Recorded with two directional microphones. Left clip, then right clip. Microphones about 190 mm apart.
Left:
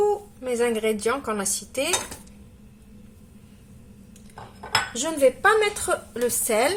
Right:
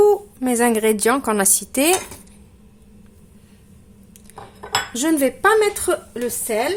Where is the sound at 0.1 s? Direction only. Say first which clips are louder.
Right 7 dB; 55° right (ahead or behind).